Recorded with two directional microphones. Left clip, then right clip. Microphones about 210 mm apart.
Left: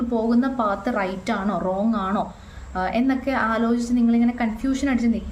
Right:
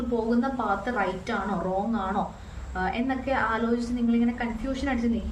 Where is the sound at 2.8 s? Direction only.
50° left (ahead or behind).